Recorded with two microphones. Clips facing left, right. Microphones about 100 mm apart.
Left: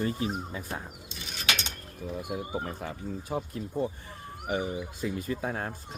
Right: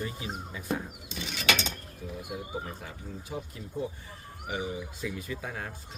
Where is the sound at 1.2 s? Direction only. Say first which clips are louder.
Right 3 dB; 90° right.